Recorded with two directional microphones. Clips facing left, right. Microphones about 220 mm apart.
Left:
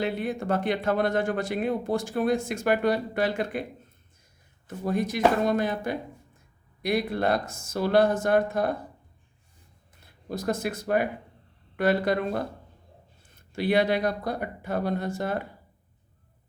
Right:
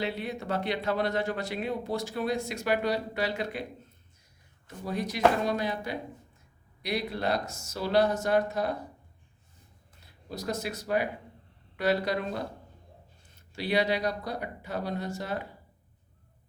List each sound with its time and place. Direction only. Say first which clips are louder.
0.0 s speech: left 5 dB; 50° left (ahead or behind)
4.9 s speech: left 2 dB; 50° left (ahead or behind)
10.2 s speech: left 5 dB; 50° left (ahead or behind)